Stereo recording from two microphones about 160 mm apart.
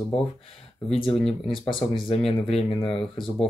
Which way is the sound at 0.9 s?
35° left (ahead or behind).